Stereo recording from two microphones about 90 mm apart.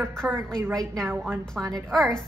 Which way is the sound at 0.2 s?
5° right (ahead or behind).